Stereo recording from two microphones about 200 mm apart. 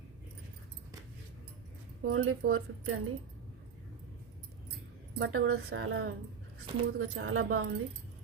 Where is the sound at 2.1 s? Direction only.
90° right.